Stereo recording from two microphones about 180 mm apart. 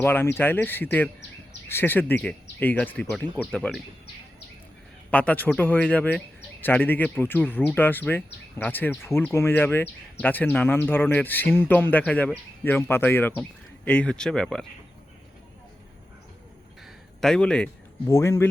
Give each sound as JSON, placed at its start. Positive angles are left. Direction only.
{"t": 0.0, "sound": "speech", "side_deg": 10}
{"t": 5.1, "sound": "speech", "side_deg": 10}
{"t": 16.8, "sound": "a sound", "side_deg": 0}
{"t": 18.1, "sound": "speech", "side_deg": 15}